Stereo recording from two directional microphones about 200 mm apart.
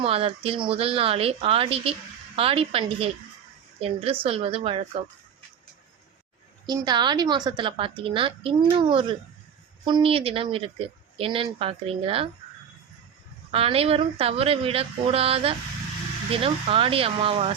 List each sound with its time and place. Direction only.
0.0 s speech: 30° right (ahead or behind)
6.7 s speech: 20° right (ahead or behind)
13.5 s speech: 30° right (ahead or behind)